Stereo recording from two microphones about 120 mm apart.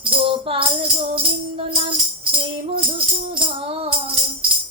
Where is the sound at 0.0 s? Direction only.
45° right (ahead or behind).